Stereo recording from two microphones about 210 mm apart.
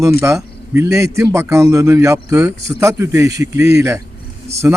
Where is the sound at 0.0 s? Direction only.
15° right (ahead or behind).